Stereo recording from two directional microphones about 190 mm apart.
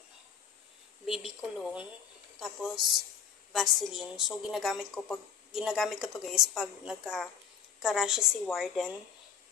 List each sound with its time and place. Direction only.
1.0 s a woman's voice: centre (ahead or behind)